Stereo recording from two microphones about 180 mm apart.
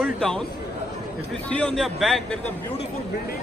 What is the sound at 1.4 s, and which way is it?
A man's voice, 5° left (ahead or behind).